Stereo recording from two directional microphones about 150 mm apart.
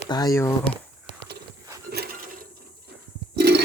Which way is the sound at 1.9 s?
90° right.